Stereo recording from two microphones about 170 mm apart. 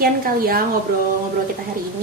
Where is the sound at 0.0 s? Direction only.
60° right (ahead or behind).